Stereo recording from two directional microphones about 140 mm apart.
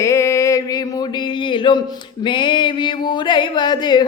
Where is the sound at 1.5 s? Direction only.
35° left (ahead or behind).